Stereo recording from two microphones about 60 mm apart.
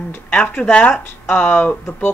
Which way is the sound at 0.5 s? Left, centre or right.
Left.